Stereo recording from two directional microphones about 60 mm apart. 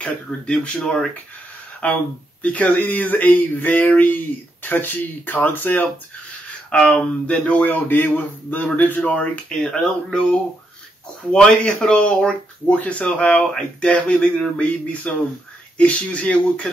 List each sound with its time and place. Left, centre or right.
0.0 s speech: centre
1.8 s speech: left
6.9 s speech: left